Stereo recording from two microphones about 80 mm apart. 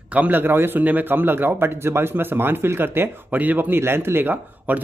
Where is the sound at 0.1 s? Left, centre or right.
Right.